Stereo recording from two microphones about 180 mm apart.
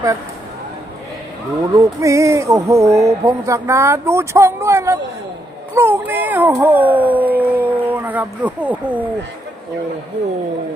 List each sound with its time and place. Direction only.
1.7 s speech: 15° right (ahead or behind)